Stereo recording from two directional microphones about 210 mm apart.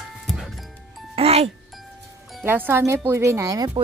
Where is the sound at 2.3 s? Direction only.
5° right (ahead or behind).